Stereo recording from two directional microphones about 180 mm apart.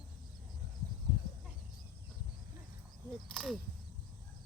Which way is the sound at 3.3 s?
Centre (ahead or behind).